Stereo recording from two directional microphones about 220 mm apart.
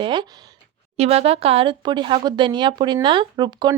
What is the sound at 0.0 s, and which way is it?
Speech, 20° right (ahead or behind).